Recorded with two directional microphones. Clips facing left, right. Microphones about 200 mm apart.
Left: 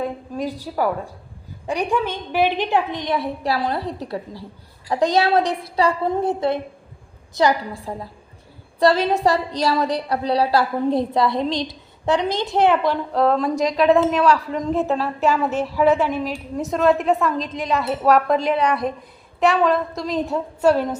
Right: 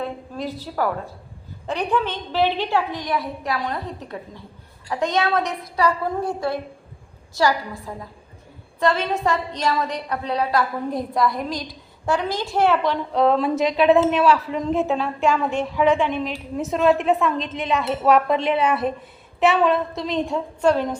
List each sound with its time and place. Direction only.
0.0 s a sound: 15° left (ahead or behind)
1.6 s a woman's voice: 10° left (ahead or behind)
8.8 s a woman's voice: 35° left (ahead or behind); by 20.9 s 5° left (ahead or behind)